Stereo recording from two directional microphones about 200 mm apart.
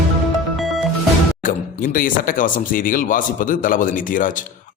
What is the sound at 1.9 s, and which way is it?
A man's voice, 45° left (ahead or behind).